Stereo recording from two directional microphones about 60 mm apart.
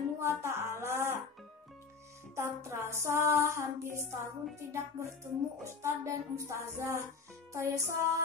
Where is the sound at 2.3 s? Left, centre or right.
Right.